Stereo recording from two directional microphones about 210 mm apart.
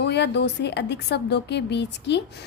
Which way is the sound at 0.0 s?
55° left (ahead or behind).